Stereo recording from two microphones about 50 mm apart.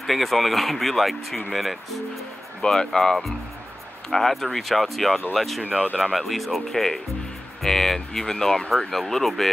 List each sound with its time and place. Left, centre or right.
0.0 s speech: centre
5.6 s speech: right
6.1 s speech: centre